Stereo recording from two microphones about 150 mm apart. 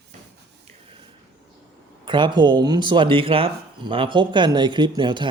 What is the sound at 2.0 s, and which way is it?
Speech, 30° right (ahead or behind).